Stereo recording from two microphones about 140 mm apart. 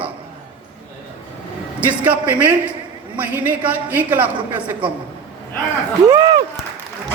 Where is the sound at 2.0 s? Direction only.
10° right (ahead or behind).